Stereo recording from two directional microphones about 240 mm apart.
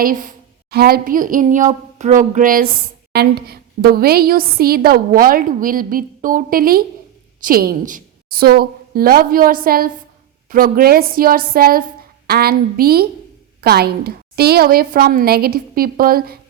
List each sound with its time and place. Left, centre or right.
0.0 s a woman's voice: right